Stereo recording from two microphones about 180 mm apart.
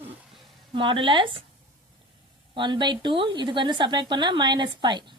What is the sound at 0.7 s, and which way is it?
Speech, 25° right (ahead or behind).